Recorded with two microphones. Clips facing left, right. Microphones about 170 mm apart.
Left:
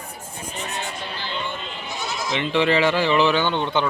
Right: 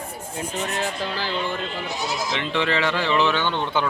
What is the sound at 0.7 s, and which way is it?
Speech, 90° right.